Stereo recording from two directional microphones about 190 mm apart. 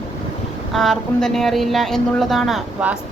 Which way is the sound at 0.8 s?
Centre (ahead or behind).